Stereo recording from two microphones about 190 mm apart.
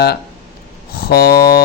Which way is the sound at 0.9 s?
55° left (ahead or behind).